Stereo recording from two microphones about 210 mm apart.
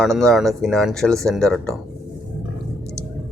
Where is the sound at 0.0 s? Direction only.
Centre (ahead or behind).